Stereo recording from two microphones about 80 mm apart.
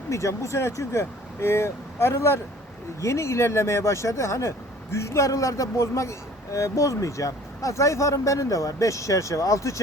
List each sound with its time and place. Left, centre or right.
0.1 s speech: left